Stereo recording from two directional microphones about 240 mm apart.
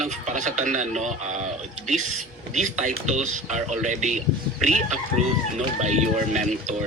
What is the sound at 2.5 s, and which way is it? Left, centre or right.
Speech, right.